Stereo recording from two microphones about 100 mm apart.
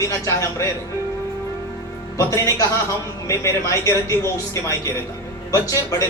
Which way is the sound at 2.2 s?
35° left (ahead or behind).